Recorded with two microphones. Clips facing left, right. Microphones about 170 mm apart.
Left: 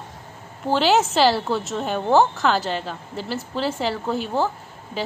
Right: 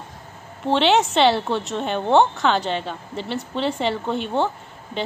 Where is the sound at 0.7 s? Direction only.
Centre (ahead or behind).